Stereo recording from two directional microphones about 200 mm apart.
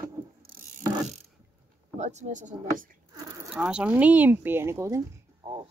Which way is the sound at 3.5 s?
5° right (ahead or behind).